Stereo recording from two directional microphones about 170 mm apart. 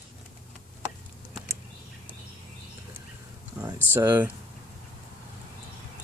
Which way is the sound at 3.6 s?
15° right (ahead or behind).